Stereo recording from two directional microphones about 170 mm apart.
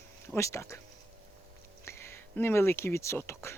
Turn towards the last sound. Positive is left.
turn(degrees=15)  # may be behind; listen again after turning